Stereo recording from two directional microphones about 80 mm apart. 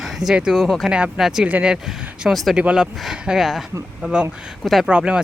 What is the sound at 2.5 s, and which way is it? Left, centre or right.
Speech, centre.